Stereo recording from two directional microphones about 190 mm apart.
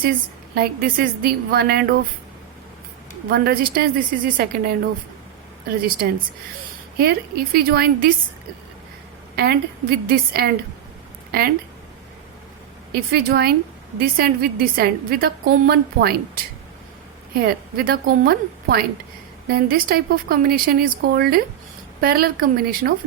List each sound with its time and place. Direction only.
0.5 s a woman's voice: 55° right (ahead or behind)
3.2 s a woman's voice: 55° right (ahead or behind)
7.0 s a woman's voice: 55° right (ahead or behind)
9.3 s a woman's voice: 55° right (ahead or behind)
12.9 s a woman's voice: 60° right (ahead or behind)